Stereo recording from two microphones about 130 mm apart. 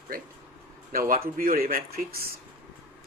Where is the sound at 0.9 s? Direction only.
90° right.